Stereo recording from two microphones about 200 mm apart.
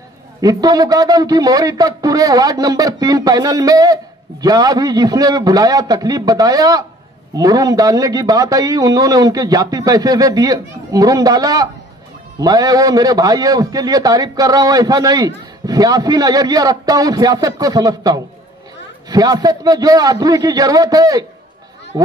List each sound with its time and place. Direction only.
0.4 s a man's voice: 20° right (ahead or behind)